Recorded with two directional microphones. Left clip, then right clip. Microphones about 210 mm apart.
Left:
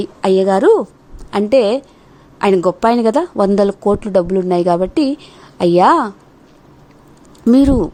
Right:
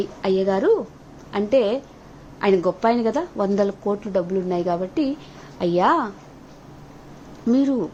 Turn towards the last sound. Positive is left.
turn(degrees=55)  # may be behind; listen again after turning